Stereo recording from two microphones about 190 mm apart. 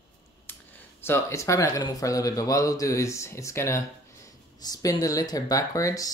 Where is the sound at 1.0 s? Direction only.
15° left (ahead or behind).